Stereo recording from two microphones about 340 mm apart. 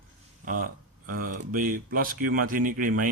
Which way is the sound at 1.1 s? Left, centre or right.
Right.